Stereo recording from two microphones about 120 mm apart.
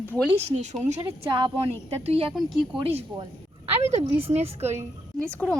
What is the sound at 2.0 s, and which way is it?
Speech, 55° right (ahead or behind).